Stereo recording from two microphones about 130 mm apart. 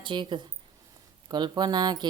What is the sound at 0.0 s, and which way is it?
Speech, 40° right (ahead or behind).